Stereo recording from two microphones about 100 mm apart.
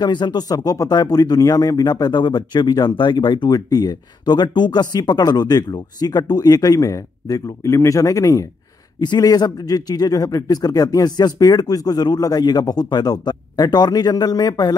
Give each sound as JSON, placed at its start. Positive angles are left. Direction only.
{"t": 0.0, "sound": "speech", "side_deg": 45}
{"t": 9.0, "sound": "speech", "side_deg": 45}